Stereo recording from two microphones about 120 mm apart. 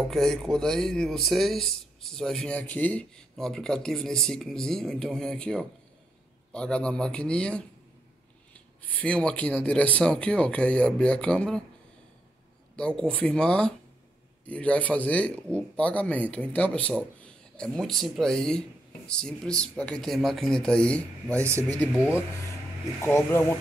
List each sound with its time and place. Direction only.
0.1 s a man's voice: 5° left (ahead or behind)
12.7 s a man's voice: 5° left (ahead or behind)
21.5 s speech: 25° right (ahead or behind)
22.9 s speech: 20° left (ahead or behind)